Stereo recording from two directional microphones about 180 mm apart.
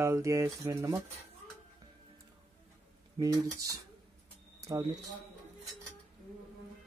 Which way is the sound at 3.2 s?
20° right (ahead or behind).